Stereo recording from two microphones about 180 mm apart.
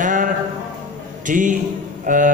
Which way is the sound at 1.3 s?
45° right (ahead or behind).